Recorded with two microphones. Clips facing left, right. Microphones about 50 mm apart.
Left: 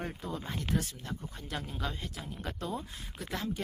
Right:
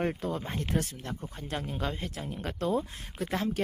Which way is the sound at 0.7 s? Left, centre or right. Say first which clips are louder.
Right 1 dB; right.